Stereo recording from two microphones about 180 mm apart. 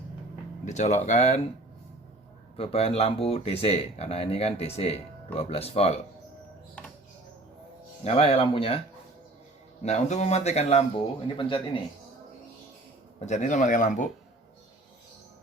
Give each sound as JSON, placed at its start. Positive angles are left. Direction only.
{"t": 0.6, "sound": "speech", "side_deg": 40}
{"t": 2.6, "sound": "speech", "side_deg": 35}
{"t": 8.0, "sound": "speech", "side_deg": 35}
{"t": 9.8, "sound": "speech", "side_deg": 40}
{"t": 13.1, "sound": "speech", "side_deg": 40}